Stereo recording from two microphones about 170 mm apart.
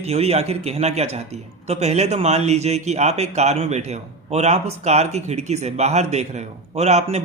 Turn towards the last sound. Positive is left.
turn(degrees=-40)  # may be behind; listen again after turning